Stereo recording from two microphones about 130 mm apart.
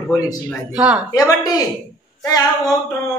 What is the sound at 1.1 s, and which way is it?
A man's voice, 25° left (ahead or behind).